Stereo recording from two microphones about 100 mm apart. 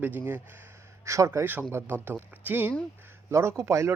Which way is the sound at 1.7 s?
20° right (ahead or behind).